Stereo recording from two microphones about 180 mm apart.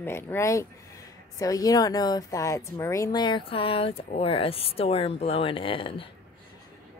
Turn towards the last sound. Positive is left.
turn(degrees=30)  # may be behind; listen again after turning